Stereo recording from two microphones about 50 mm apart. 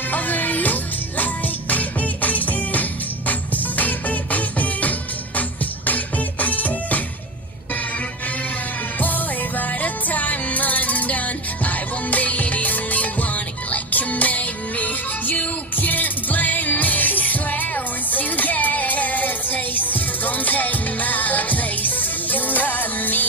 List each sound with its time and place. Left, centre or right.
0.1 s music: left
9.0 s music: left